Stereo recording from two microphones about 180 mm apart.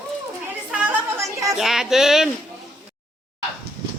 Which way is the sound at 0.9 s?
15° right (ahead or behind).